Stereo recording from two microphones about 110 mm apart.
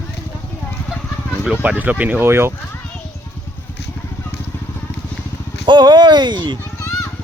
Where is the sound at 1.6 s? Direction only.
15° right (ahead or behind).